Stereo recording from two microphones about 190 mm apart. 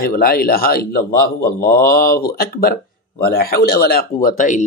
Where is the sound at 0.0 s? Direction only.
50° left (ahead or behind).